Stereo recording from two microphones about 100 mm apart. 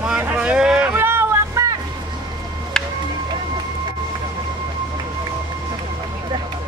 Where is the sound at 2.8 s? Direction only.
5° left (ahead or behind).